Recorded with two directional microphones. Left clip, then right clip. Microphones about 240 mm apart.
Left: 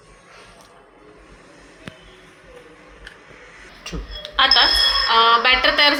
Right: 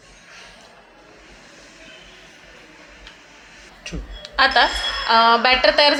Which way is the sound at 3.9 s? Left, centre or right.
Centre.